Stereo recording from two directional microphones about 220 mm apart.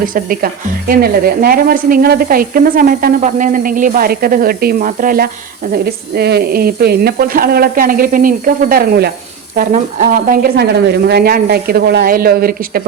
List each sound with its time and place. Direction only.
0.0 s a woman's voice: 40° right (ahead or behind)